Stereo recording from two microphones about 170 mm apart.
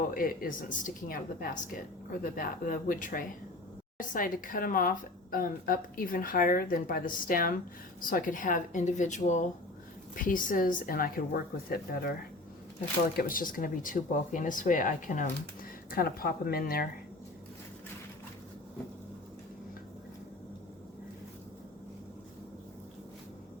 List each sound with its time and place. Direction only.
0.0 s a woman's voice: 55° left (ahead or behind)
13.1 s a woman's voice: 55° left (ahead or behind)